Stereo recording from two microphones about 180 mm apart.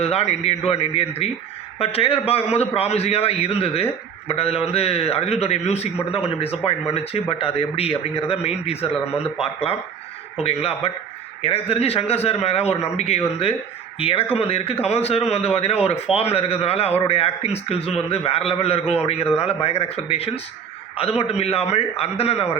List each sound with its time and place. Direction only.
0.0 s a man's voice: 35° left (ahead or behind)
10.4 s a man's voice: 35° left (ahead or behind)